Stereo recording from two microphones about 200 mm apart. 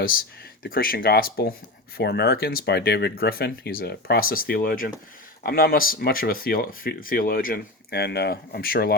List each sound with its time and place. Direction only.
0.6 s speech: 45° left (ahead or behind)